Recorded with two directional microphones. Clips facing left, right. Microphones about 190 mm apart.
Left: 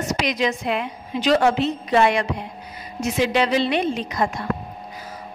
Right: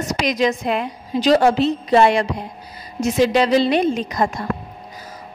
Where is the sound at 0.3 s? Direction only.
40° right (ahead or behind).